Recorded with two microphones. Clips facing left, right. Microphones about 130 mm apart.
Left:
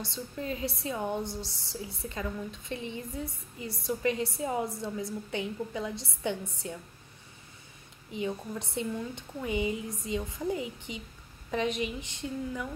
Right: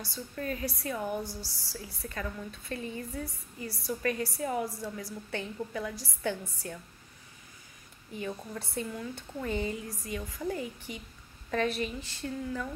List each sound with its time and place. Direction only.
0.0 s a woman's voice: 20° left (ahead or behind)
8.1 s a woman's voice: 20° left (ahead or behind)